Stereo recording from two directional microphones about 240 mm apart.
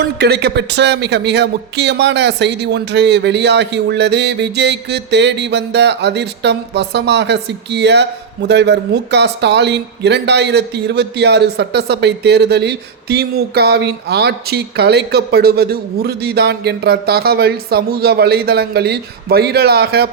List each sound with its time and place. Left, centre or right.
0.0 s speech: right